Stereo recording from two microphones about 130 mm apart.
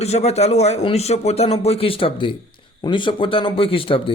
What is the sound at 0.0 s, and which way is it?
A man's voice, 55° left (ahead or behind).